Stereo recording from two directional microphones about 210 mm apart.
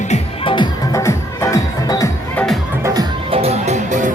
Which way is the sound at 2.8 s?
20° right (ahead or behind).